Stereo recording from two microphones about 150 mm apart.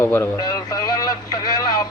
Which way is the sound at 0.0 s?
20° left (ahead or behind).